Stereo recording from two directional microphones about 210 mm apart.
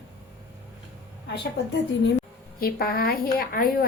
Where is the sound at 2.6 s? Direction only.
45° left (ahead or behind).